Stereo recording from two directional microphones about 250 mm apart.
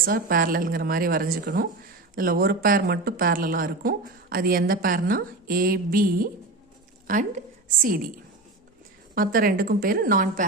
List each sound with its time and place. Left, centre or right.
0.0 s a woman's voice: right
9.1 s a woman's voice: right